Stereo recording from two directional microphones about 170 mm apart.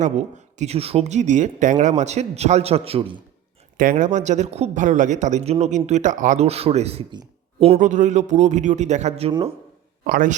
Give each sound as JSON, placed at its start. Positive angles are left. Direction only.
{"t": 0.0, "sound": "speech", "side_deg": -45}
{"t": 3.8, "sound": "speech", "side_deg": -50}
{"t": 10.0, "sound": "speech", "side_deg": -50}